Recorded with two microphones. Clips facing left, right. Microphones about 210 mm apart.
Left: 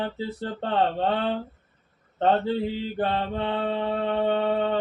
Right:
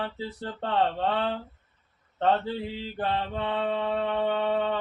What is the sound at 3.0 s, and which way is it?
Mantra, 35° left (ahead or behind).